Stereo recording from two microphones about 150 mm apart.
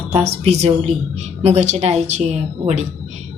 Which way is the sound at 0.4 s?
45° right (ahead or behind).